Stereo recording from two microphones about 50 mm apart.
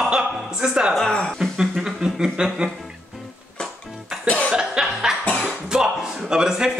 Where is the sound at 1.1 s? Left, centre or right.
Centre.